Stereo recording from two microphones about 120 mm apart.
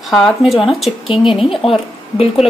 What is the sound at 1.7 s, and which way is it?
Speech, 55° left (ahead or behind).